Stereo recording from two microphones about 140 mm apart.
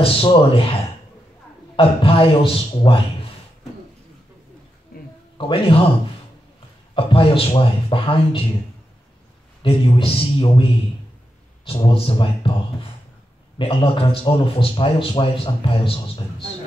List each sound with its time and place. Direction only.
0.0 s a man's voice: 40° left (ahead or behind)
1.8 s a man's voice: 40° left (ahead or behind)
5.4 s a man's voice: 40° left (ahead or behind)
7.0 s a man's voice: 40° left (ahead or behind)
9.6 s a man's voice: 40° left (ahead or behind)